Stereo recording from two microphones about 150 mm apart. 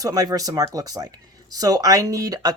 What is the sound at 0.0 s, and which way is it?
Speech, 25° right (ahead or behind).